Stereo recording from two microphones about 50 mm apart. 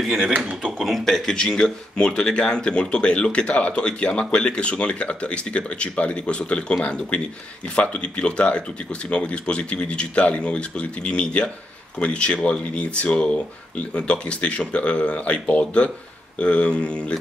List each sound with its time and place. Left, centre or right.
0.0 s speech: centre